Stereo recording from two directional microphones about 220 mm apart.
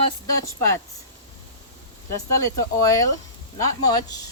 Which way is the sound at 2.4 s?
15° left (ahead or behind).